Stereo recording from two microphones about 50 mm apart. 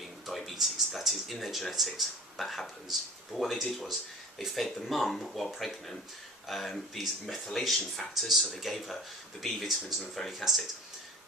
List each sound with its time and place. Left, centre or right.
0.3 s speech: centre